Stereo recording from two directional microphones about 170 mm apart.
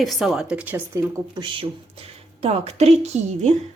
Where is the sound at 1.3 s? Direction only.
30° right (ahead or behind).